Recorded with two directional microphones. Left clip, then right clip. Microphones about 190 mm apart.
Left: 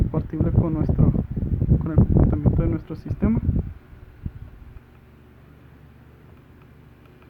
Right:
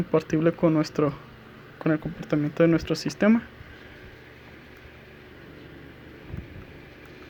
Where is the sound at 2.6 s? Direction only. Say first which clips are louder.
Right 7 dB; 10° right (ahead or behind).